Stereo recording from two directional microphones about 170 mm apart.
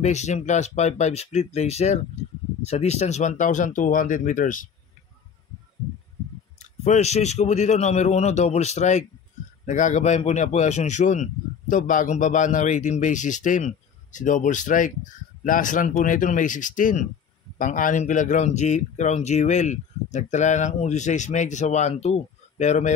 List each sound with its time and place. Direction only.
0.0 s a man's voice: 40° left (ahead or behind)
2.2 s a sound: 40° left (ahead or behind)
2.6 s speech: 40° left (ahead or behind)
6.6 s a man's voice: 40° left (ahead or behind)